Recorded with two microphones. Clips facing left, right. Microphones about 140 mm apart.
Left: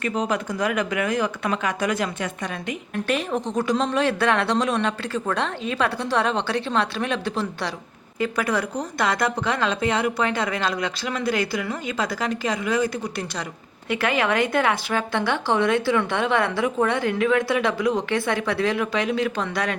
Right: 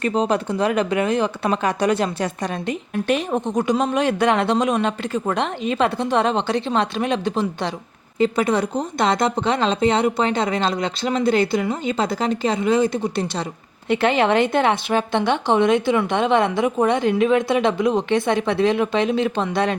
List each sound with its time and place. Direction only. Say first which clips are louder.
0.0 s speech: right 5 dB; 30° right (ahead or behind)
2.9 s a woman's voice: right 3 dB; 20° right (ahead or behind)